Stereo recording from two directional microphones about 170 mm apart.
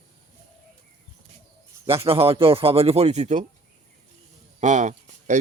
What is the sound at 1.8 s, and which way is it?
Speech, 35° right (ahead or behind).